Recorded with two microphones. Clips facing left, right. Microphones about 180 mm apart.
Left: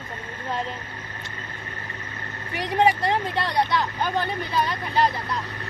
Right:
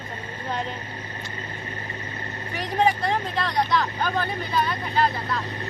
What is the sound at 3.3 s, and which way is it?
Speech, 25° left (ahead or behind).